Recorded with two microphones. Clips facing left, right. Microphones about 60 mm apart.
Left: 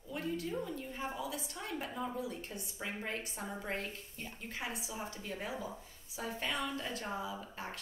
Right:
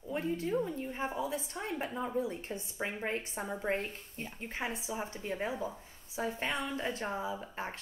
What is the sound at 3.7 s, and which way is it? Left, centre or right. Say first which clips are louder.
A woman's voice: right 5 dB; right.